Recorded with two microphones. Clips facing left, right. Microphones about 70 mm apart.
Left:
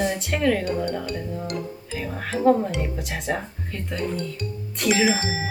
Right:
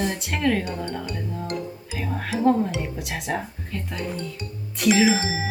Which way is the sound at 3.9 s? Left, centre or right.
Centre.